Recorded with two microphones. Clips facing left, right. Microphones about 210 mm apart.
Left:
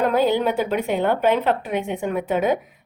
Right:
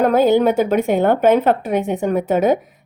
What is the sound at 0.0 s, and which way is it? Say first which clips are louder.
A woman's voice: right 5 dB; 45° right (ahead or behind).